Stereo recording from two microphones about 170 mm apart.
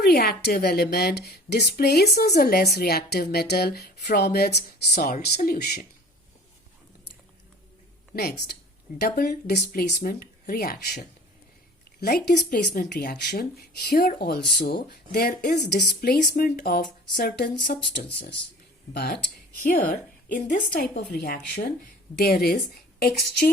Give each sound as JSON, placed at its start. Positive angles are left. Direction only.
{"t": 0.0, "sound": "speech", "side_deg": 65}
{"t": 8.1, "sound": "speech", "side_deg": 65}
{"t": 18.9, "sound": "speech", "side_deg": 70}
{"t": 19.7, "sound": "speech", "side_deg": 50}